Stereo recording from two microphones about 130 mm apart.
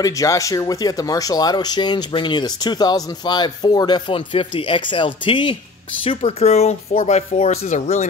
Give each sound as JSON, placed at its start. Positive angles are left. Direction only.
{"t": 0.0, "sound": "speech", "side_deg": 25}
{"t": 6.0, "sound": "speech", "side_deg": 50}